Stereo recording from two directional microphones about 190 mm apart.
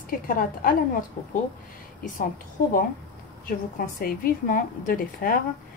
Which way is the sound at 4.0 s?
45° left (ahead or behind).